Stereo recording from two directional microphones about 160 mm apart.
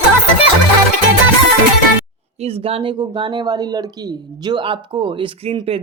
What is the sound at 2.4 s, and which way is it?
Speech, 35° right (ahead or behind).